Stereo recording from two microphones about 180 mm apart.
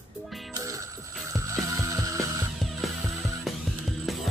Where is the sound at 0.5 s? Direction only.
20° right (ahead or behind).